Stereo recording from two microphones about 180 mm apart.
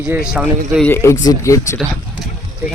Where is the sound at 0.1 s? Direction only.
5° right (ahead or behind).